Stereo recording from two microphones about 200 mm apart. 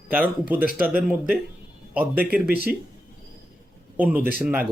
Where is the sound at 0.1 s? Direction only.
10° right (ahead or behind).